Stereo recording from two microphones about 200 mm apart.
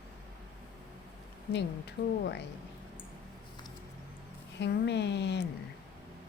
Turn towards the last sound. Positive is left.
turn(degrees=60)  # may be behind; listen again after turning